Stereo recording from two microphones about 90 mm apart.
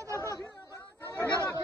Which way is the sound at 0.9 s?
25° left (ahead or behind).